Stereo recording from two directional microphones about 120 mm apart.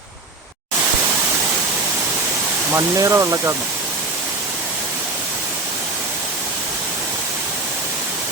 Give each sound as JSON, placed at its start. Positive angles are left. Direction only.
{"t": 2.7, "sound": "speech", "side_deg": -25}